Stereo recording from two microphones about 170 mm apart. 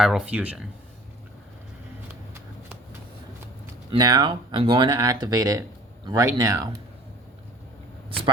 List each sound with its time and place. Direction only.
0.0 s speech: 5° right (ahead or behind)
3.9 s speech: 25° right (ahead or behind)